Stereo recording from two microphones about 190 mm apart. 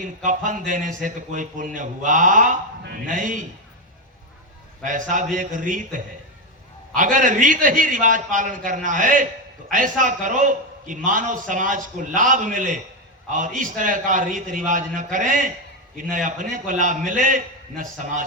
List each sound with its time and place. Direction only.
0.0 s a man's voice: 40° right (ahead or behind)
4.8 s a man's voice: 45° right (ahead or behind)
6.9 s a man's voice: 45° right (ahead or behind)